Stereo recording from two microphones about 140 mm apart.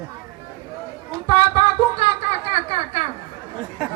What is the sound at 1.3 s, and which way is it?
Music, 40° left (ahead or behind).